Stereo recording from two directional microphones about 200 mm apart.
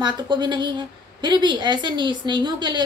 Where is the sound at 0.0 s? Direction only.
20° right (ahead or behind).